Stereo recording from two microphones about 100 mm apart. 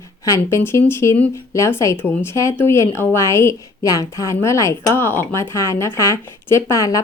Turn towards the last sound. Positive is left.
turn(degrees=35)  # may be behind; listen again after turning